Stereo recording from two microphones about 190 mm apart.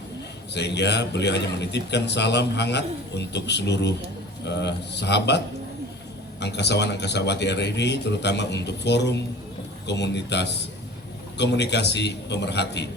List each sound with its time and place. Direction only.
0.5 s a man's voice: 65° left (ahead or behind)
6.4 s a man's voice: 65° left (ahead or behind)